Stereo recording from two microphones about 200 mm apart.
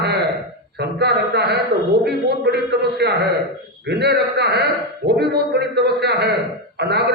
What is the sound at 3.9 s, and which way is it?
A man's voice, 55° right (ahead or behind).